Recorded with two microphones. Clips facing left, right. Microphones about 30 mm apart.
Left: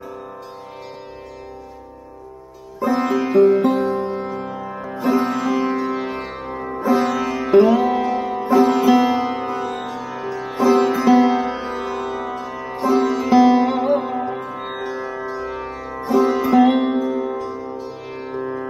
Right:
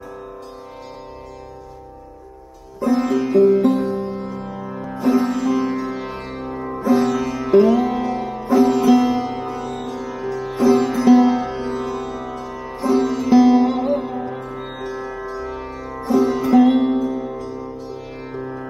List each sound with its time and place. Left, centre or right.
2.8 s music: centre
12.8 s sitar: centre
18.4 s music: left